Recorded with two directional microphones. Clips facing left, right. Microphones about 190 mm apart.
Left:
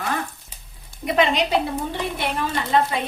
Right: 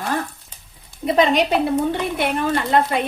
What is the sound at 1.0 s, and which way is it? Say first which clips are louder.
Speech: right 3 dB; 35° right (ahead or behind).